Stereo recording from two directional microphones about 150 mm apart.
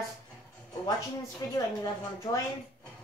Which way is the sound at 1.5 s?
20° left (ahead or behind).